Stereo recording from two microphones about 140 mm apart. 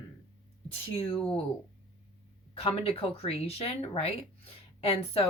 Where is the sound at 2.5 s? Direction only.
45° left (ahead or behind).